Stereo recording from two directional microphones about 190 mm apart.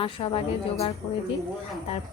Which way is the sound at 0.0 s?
30° left (ahead or behind).